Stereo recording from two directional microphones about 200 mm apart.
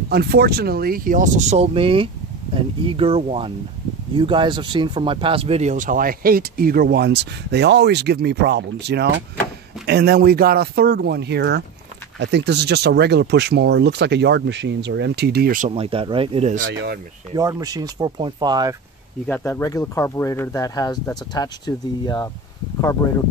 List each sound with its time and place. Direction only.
0.1 s speech: 55° right (ahead or behind)
15.7 s speech: 25° right (ahead or behind)
17.3 s speech: 20° right (ahead or behind)
19.2 s speech: 10° left (ahead or behind)